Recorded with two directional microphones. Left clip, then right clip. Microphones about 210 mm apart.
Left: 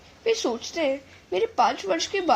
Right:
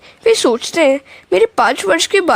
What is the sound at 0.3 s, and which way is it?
Speech, 50° right (ahead or behind).